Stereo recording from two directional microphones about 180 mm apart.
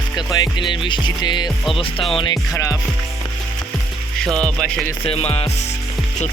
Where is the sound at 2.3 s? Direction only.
20° left (ahead or behind).